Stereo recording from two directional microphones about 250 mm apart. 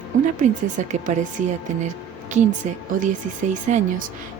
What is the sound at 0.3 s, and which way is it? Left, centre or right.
Speech, right.